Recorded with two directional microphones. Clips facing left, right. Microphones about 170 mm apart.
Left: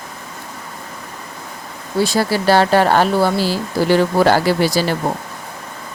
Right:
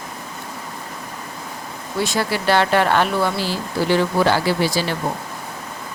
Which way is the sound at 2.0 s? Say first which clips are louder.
Left 5 dB; 35° left (ahead or behind).